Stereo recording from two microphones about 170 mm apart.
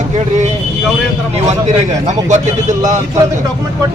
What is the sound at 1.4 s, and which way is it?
Speech, 45° right (ahead or behind).